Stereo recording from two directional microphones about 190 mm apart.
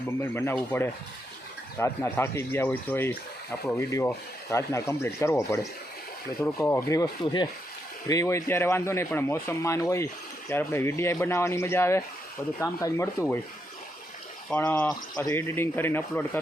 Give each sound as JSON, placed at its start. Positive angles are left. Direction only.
{"t": 0.2, "sound": "a man's voice", "side_deg": 15}
{"t": 14.5, "sound": "a man's voice", "side_deg": 10}